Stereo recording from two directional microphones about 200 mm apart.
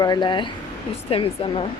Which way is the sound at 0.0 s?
20° left (ahead or behind).